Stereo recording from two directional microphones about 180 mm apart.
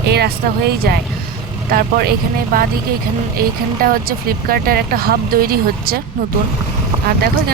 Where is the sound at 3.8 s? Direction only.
55° right (ahead or behind).